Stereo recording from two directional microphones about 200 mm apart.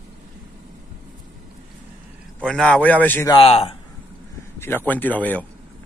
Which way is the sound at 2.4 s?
5° left (ahead or behind).